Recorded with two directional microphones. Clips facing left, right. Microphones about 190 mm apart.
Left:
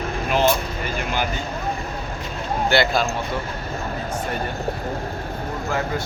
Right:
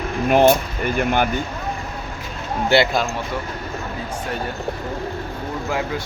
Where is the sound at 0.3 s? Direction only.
55° right (ahead or behind).